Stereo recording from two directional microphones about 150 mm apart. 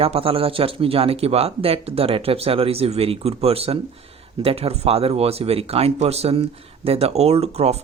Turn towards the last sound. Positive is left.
turn(degrees=-45)  # may be behind; listen again after turning